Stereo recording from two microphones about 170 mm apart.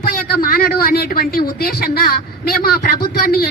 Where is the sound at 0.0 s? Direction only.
60° left (ahead or behind).